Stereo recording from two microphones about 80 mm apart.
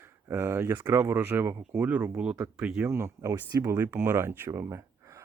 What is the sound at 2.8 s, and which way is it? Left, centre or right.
Speech, right.